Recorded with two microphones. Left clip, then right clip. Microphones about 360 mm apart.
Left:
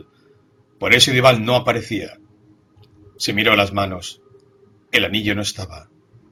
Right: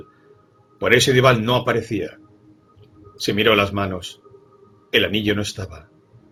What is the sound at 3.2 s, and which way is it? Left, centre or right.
Speech, centre.